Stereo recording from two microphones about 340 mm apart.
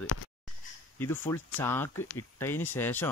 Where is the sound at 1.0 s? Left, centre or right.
Centre.